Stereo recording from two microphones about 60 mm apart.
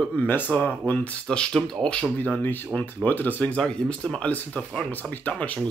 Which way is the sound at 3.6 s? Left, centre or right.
Centre.